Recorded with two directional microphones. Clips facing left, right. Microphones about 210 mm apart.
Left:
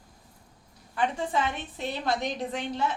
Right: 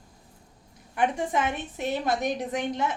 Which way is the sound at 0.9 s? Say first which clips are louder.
Right 2 dB; 20° right (ahead or behind).